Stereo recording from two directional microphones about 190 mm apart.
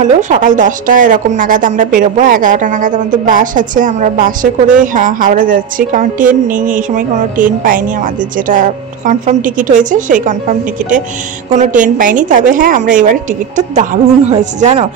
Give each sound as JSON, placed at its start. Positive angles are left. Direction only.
{"t": 0.0, "sound": "a woman's voice", "side_deg": -40}
{"t": 11.5, "sound": "a woman's voice", "side_deg": -40}